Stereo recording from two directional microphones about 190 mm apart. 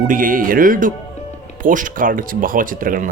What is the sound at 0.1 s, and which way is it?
Speech, 45° right (ahead or behind).